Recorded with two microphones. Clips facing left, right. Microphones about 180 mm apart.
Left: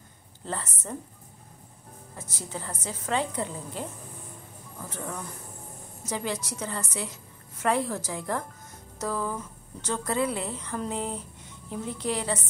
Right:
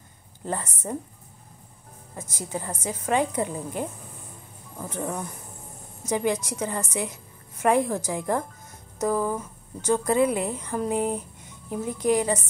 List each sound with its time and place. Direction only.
0.5 s a woman's voice: 15° right (ahead or behind)
2.1 s a woman's voice: 15° right (ahead or behind)